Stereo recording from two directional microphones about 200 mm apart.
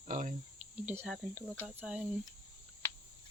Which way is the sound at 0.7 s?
10° right (ahead or behind).